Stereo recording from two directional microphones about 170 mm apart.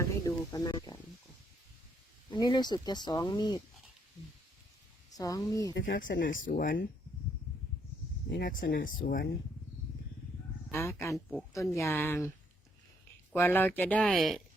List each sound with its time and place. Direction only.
0.0 s sizzle: 20° left (ahead or behind)
2.3 s speech: 25° left (ahead or behind)
5.1 s speech: 20° left (ahead or behind)
5.7 s speech: 85° left
6.1 s speech: 55° left (ahead or behind)
8.7 s speech: 55° left (ahead or behind)
10.7 s speech: 15° left (ahead or behind)
13.3 s speech: 10° left (ahead or behind)